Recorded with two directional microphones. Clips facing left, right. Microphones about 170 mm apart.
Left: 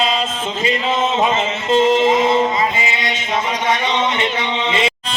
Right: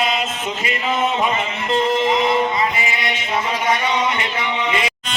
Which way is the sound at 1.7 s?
25° left (ahead or behind).